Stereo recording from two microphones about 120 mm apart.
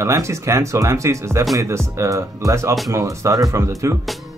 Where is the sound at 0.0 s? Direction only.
25° right (ahead or behind).